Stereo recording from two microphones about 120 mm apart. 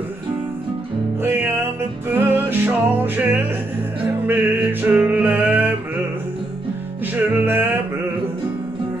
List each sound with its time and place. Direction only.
1.2 s music: 20° right (ahead or behind)
7.3 s music: 20° right (ahead or behind)